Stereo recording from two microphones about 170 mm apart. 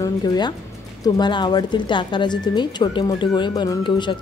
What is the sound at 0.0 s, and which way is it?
A woman's voice, 25° left (ahead or behind).